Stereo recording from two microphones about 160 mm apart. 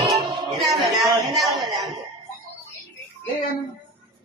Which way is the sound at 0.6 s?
Centre (ahead or behind).